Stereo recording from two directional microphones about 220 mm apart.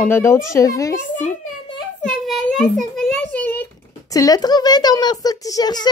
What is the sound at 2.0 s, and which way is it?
Speech, centre (ahead or behind).